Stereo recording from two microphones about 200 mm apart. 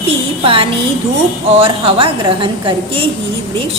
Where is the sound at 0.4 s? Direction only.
25° right (ahead or behind).